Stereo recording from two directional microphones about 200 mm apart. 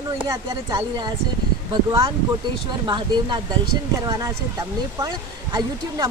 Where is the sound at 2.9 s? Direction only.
20° right (ahead or behind).